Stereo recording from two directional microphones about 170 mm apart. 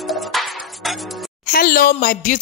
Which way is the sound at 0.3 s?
Centre (ahead or behind).